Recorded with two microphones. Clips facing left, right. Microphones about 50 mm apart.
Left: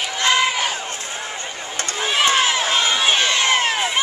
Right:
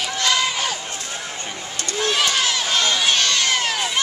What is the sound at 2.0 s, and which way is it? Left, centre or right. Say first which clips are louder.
Run: even; centre.